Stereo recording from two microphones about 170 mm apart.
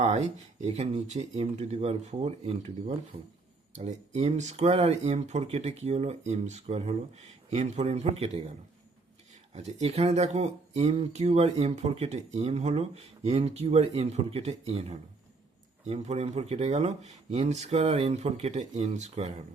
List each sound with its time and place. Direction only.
0.0 s speech: 35° right (ahead or behind)
9.6 s speech: 40° right (ahead or behind)